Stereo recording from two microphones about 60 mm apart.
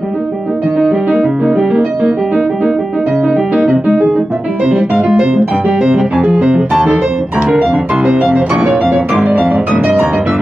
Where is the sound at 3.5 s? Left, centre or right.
Centre.